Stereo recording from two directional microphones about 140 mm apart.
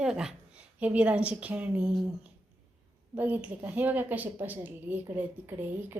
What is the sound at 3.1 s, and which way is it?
A woman's voice, 10° right (ahead or behind).